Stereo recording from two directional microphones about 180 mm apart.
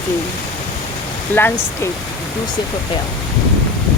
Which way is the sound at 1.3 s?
10° left (ahead or behind).